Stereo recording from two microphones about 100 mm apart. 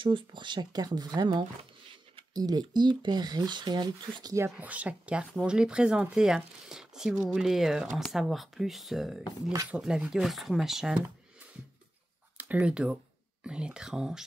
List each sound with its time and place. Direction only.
0.0 s speech: 55° right (ahead or behind)
4.6 s speech: 15° right (ahead or behind)
12.4 s speech: 15° right (ahead or behind)